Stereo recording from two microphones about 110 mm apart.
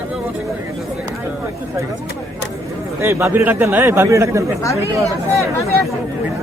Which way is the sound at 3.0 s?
25° right (ahead or behind).